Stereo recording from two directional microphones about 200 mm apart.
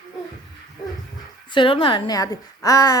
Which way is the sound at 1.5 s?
25° left (ahead or behind).